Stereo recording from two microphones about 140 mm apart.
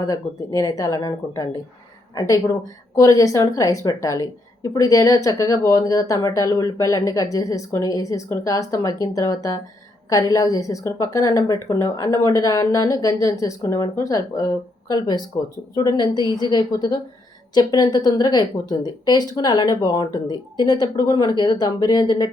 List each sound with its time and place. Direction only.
0.0 s a woman's voice: 25° left (ahead or behind)